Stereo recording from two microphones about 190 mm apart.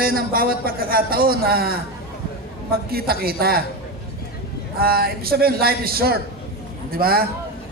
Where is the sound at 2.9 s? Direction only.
55° right (ahead or behind).